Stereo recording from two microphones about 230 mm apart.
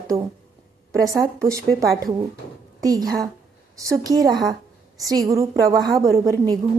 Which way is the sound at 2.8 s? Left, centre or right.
Centre.